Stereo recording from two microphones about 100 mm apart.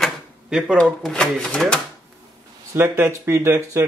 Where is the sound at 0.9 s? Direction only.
5° left (ahead or behind).